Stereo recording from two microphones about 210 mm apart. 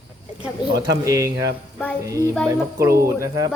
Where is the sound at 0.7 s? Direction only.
15° right (ahead or behind).